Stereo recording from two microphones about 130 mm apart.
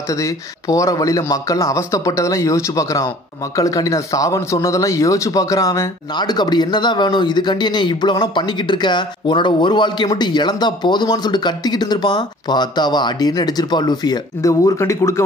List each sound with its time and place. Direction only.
0.1 s a man's voice: 25° left (ahead or behind)